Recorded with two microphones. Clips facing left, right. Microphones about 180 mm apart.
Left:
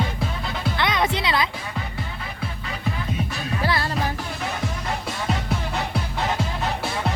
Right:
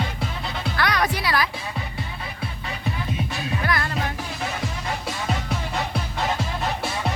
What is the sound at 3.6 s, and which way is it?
Music, 30° left (ahead or behind).